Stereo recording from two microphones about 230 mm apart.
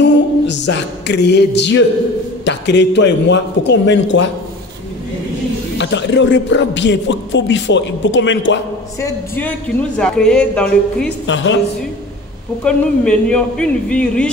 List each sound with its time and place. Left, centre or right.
0.0 s a capella: left
2.4 s speech: left
5.8 s speech: left
9.0 s speech: centre
11.2 s speech: left
12.6 s speech: centre